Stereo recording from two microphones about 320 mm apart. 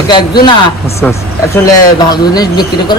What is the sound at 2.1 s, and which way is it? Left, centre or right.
Speech, centre.